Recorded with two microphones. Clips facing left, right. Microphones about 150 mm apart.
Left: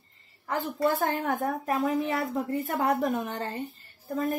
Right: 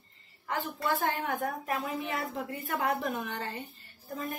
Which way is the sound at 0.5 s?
40° left (ahead or behind).